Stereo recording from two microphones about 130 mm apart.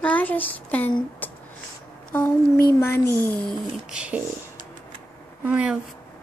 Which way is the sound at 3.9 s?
10° right (ahead or behind).